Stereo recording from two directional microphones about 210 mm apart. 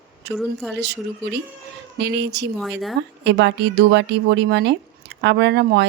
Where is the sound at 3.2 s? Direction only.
55° right (ahead or behind).